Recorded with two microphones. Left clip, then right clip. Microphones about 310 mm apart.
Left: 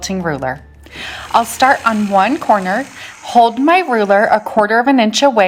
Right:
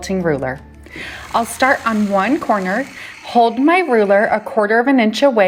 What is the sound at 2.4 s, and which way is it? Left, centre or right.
Speech, left.